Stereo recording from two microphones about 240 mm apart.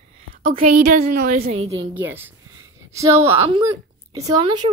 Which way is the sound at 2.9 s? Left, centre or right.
Centre.